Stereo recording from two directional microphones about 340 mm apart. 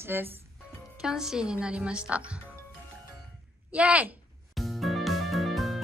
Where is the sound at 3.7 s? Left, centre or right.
Centre.